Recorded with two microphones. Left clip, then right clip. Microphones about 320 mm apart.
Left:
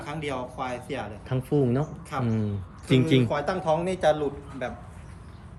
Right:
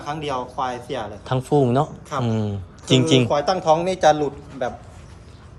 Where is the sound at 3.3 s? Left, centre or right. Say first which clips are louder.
Right 7 dB; centre.